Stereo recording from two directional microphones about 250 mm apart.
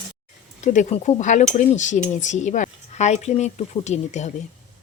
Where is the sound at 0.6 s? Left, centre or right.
Left.